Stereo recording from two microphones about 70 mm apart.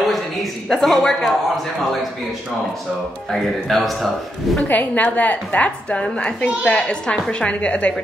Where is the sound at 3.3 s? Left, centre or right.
Centre.